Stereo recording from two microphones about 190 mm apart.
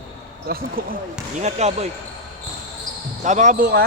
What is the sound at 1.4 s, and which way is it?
Speech, 35° right (ahead or behind).